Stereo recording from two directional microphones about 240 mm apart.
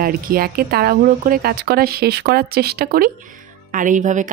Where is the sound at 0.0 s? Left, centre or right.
Right.